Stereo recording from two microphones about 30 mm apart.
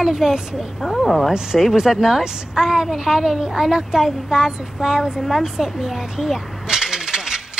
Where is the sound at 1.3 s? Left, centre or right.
Centre.